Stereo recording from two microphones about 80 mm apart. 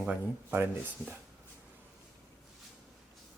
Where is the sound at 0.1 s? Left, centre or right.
Right.